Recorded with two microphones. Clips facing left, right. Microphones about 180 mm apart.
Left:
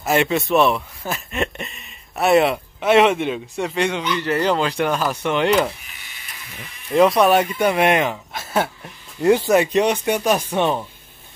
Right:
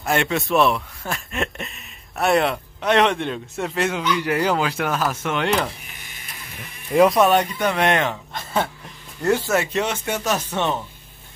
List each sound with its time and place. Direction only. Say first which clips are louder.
0.0 s speech: left 3 dB; centre (ahead or behind)
6.9 s speech: left 1 dB; 5° right (ahead or behind)
9.2 s speech: left 5 dB; 15° left (ahead or behind)